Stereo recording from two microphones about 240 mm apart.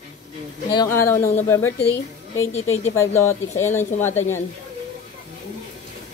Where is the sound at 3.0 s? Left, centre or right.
Centre.